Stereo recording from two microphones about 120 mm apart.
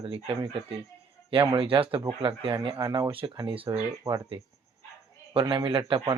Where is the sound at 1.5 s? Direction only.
45° right (ahead or behind).